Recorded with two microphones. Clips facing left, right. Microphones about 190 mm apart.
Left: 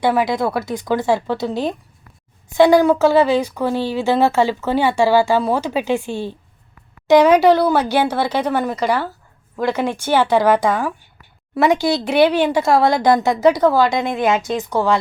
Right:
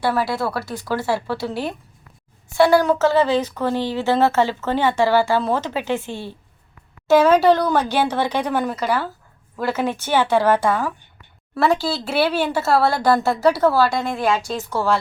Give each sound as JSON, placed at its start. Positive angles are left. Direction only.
{"t": 0.0, "sound": "speech", "side_deg": 15}